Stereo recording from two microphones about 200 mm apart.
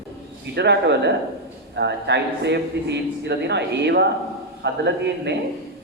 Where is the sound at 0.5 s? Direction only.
55° right (ahead or behind).